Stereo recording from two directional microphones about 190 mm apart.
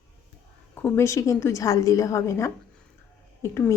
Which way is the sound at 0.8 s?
10° left (ahead or behind).